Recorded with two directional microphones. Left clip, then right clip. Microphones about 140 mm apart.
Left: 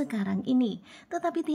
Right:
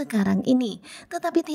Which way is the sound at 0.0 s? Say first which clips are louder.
Right 7 dB; 50° right (ahead or behind).